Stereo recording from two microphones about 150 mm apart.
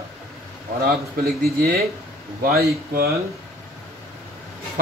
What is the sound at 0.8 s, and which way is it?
A man's voice, 85° right.